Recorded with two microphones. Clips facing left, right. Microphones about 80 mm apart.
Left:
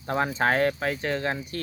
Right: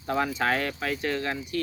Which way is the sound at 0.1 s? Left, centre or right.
Left.